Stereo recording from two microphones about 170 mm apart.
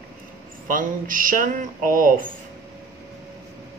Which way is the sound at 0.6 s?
55° right (ahead or behind).